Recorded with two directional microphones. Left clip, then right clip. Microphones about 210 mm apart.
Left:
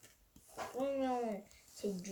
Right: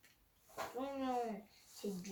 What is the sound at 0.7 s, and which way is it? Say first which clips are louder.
Speech: left 7 dB; 5° right (ahead or behind).